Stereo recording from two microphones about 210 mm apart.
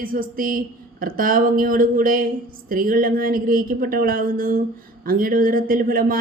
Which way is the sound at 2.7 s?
40° right (ahead or behind).